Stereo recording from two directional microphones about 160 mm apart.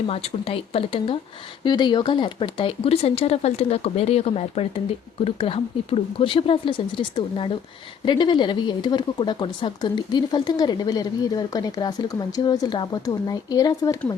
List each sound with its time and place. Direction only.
0.1 s speech: 40° left (ahead or behind); by 14.0 s 25° left (ahead or behind)